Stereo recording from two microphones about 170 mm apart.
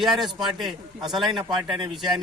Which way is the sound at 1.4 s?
25° right (ahead or behind).